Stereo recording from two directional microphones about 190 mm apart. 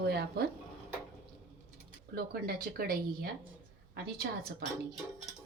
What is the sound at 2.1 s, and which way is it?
A woman's voice, 55° right (ahead or behind).